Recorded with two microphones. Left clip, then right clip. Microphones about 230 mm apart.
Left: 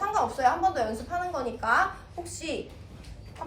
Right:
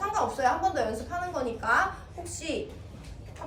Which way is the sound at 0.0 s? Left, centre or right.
Left.